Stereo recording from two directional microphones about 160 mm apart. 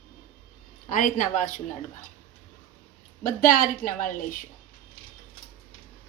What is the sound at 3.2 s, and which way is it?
Speech, 55° left (ahead or behind).